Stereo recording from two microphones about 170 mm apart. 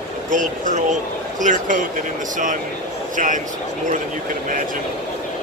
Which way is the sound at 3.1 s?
50° right (ahead or behind).